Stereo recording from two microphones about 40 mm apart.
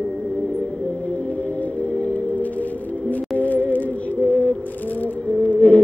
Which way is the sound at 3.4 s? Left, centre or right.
Left.